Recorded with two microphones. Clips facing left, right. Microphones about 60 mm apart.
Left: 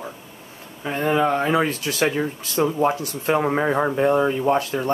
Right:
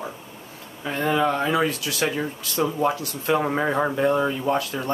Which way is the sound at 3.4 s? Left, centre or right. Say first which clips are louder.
Left 3 dB; centre.